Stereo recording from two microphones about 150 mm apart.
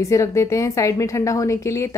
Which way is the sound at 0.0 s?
20° left (ahead or behind).